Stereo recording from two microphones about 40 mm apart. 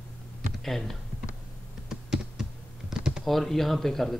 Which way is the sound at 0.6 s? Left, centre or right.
Centre.